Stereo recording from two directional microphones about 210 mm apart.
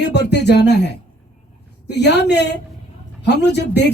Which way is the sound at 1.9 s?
55° left (ahead or behind).